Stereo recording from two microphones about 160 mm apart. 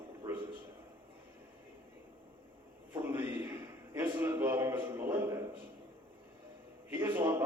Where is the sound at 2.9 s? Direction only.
15° right (ahead or behind).